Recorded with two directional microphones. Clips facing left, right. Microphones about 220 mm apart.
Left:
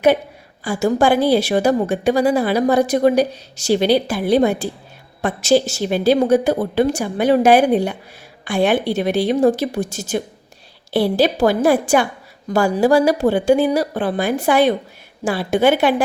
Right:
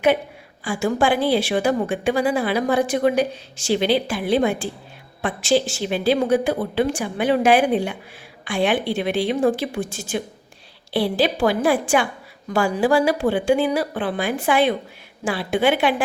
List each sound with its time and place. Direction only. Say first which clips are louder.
0.6 s a woman's voice: left 4 dB; 40° left (ahead or behind)